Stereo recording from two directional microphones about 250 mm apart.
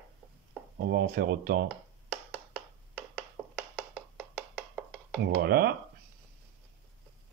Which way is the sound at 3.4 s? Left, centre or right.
Centre.